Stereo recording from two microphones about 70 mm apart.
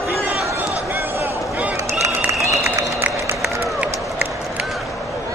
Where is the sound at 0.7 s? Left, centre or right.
Right.